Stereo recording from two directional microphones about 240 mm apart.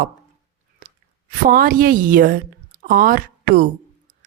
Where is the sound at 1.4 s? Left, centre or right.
Right.